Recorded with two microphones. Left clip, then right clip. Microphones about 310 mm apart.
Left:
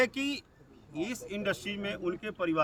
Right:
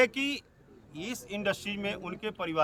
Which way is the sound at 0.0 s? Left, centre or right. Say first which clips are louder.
Right 3 dB; centre.